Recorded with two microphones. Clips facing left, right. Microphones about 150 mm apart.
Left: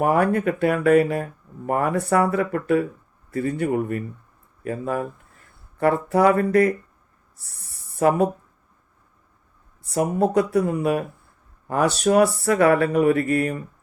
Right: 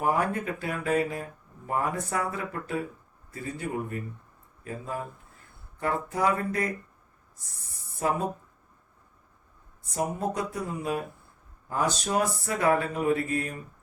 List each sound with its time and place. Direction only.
0.0 s speech: 65° left (ahead or behind)
7.9 s speech: 70° left (ahead or behind)
9.9 s speech: 70° left (ahead or behind)